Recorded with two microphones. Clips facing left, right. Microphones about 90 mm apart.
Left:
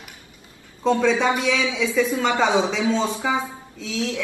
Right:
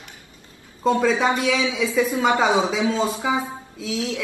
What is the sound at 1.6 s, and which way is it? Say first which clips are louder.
Speech: even; 20° right (ahead or behind).